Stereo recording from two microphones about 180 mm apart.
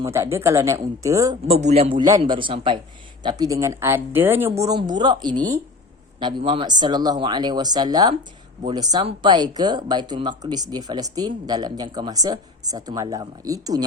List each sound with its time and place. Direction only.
0.0 s speech: 15° right (ahead or behind)
1.5 s speech: 35° right (ahead or behind)